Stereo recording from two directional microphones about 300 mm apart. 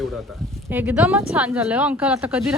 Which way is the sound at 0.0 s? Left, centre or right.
Centre.